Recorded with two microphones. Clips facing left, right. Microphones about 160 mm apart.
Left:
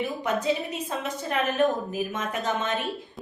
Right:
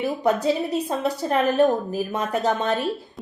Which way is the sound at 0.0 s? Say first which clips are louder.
Right 5 dB; 35° right (ahead or behind).